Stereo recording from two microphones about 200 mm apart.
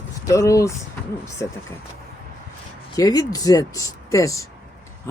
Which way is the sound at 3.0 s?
20° left (ahead or behind).